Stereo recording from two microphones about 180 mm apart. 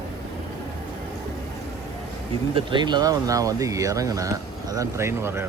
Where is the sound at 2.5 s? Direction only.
25° right (ahead or behind).